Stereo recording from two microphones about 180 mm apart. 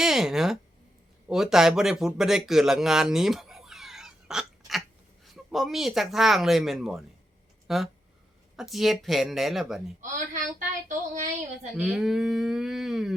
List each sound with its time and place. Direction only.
0.0 s speech: centre (ahead or behind)
10.8 s speech: 45° right (ahead or behind)
11.8 s speech: centre (ahead or behind)